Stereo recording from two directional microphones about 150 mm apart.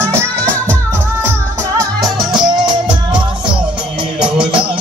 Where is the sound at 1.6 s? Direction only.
25° right (ahead or behind).